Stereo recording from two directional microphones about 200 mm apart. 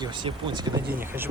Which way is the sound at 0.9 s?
10° right (ahead or behind).